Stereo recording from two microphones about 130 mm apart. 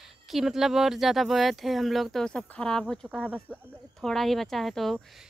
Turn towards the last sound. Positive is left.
turn(degrees=0)  # may be behind; listen again after turning